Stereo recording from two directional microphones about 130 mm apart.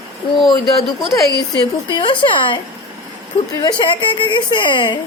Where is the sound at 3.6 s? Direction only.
40° left (ahead or behind).